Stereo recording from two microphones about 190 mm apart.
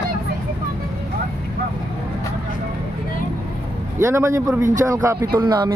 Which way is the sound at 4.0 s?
15° right (ahead or behind).